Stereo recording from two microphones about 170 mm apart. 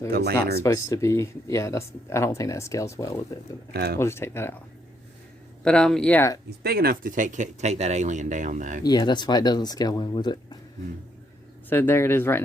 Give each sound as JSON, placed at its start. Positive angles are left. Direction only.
{"t": 0.1, "sound": "speech", "side_deg": -70}
{"t": 0.6, "sound": "speech", "side_deg": 20}
{"t": 3.7, "sound": "speech", "side_deg": -70}
{"t": 3.9, "sound": "speech", "side_deg": 15}
{"t": 5.6, "sound": "speech", "side_deg": 5}
{"t": 6.6, "sound": "speech", "side_deg": -65}
{"t": 8.8, "sound": "speech", "side_deg": 25}
{"t": 11.7, "sound": "speech", "side_deg": 10}